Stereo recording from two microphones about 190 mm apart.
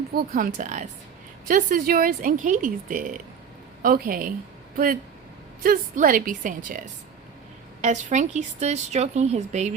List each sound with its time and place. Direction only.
0.1 s speech: 50° right (ahead or behind)
5.6 s speech: 45° right (ahead or behind)